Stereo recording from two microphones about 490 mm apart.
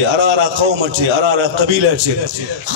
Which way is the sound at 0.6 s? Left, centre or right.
Right.